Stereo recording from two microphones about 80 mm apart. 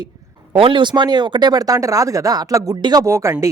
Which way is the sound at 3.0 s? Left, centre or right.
Right.